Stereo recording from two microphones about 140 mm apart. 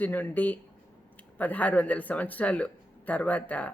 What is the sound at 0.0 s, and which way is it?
Speech, 10° left (ahead or behind).